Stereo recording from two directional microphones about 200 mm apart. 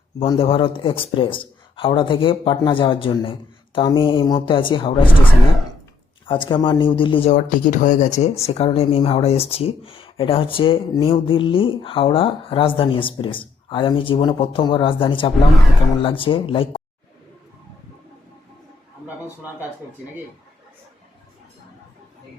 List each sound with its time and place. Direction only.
0.2 s speech: 30° left (ahead or behind)
19.0 s a man's voice: 10° right (ahead or behind)